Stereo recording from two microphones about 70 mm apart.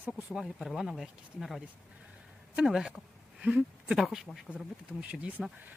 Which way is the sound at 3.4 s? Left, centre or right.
Centre.